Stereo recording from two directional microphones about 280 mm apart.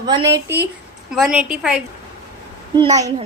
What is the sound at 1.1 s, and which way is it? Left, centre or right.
Speech, centre.